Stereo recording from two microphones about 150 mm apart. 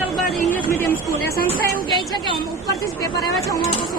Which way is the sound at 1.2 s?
90° left.